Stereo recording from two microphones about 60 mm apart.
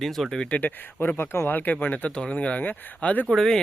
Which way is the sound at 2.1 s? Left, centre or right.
Centre.